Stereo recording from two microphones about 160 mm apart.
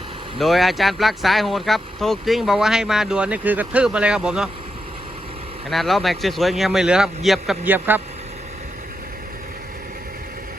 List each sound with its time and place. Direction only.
0.3 s speech: centre (ahead or behind)
5.7 s speech: centre (ahead or behind)
7.6 s a man's voice: 10° right (ahead or behind)